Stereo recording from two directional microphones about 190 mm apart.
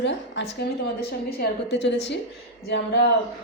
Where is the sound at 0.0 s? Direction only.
70° left (ahead or behind).